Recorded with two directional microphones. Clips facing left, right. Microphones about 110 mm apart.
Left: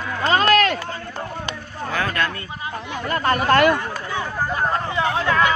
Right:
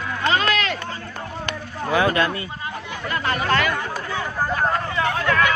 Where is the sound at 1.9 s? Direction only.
20° right (ahead or behind).